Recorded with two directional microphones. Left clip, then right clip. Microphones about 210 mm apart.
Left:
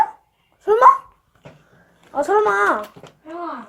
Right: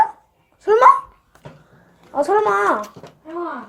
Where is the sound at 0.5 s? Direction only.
Centre (ahead or behind).